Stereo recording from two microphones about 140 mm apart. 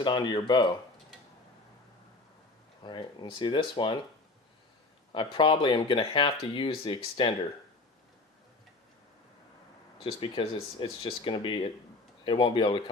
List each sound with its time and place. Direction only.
0.0 s speech: 35° left (ahead or behind)
2.8 s speech: 35° left (ahead or behind)
5.1 s speech: 35° left (ahead or behind)
10.0 s speech: 40° left (ahead or behind)